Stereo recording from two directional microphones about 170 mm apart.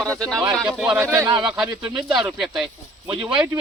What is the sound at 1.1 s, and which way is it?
Speech, 15° right (ahead or behind).